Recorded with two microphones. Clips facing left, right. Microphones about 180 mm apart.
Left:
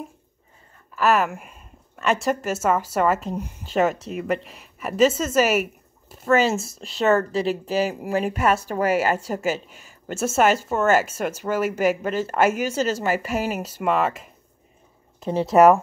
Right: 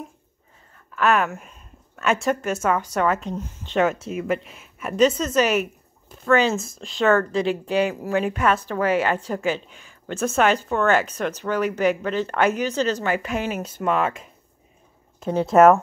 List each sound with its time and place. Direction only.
0.9 s speech: centre (ahead or behind)
8.1 s a woman's voice: 35° left (ahead or behind)
8.4 s speech: 10° left (ahead or behind)